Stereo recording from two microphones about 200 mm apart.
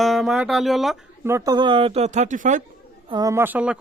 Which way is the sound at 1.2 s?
15° right (ahead or behind).